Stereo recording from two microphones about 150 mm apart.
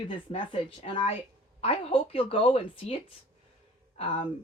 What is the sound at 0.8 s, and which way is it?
Speech, 45° left (ahead or behind).